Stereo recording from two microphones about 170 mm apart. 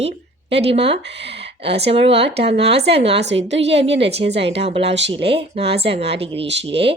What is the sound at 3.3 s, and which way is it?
Speech, 90° right.